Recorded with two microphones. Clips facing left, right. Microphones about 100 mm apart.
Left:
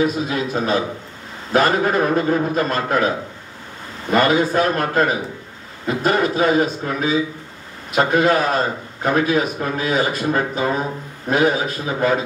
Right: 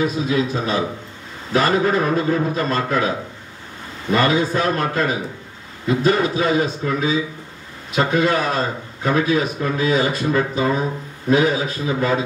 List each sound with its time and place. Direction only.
0.0 s a man's voice: 45° left (ahead or behind)
4.1 s a man's voice: 50° left (ahead or behind)